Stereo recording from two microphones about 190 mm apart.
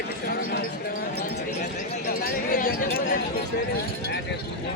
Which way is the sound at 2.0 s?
50° left (ahead or behind).